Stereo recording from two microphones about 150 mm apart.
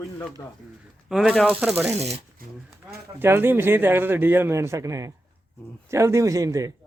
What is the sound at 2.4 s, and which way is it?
Speech, 75° right (ahead or behind).